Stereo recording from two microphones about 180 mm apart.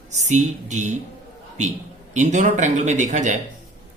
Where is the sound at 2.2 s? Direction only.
40° right (ahead or behind).